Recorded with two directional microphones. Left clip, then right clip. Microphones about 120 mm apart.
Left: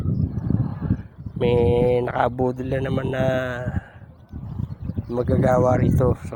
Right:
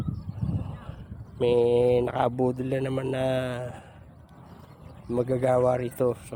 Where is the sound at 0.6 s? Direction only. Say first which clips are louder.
Left 13 dB; 15° right (ahead or behind).